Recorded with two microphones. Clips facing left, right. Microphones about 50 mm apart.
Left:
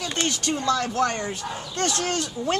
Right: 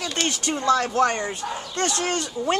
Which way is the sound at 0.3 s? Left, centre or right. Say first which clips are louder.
Right 4 dB; right.